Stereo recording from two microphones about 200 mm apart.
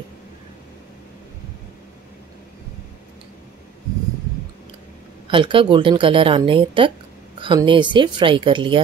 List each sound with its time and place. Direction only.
5.3 s a woman's voice: 25° right (ahead or behind)